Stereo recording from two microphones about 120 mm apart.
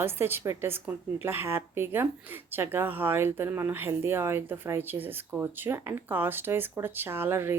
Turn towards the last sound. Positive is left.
turn(degrees=-20)  # may be behind; listen again after turning